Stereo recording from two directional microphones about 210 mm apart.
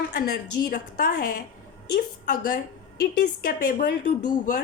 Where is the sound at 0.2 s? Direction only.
40° left (ahead or behind).